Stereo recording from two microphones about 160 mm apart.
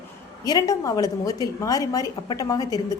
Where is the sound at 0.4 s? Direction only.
25° left (ahead or behind).